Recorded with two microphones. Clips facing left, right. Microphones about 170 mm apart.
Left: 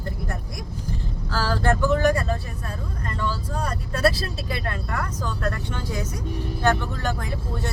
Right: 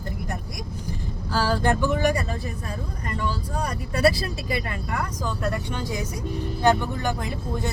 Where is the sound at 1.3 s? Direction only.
15° right (ahead or behind).